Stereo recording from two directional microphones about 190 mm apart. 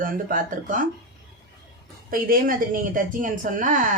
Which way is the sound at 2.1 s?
50° right (ahead or behind).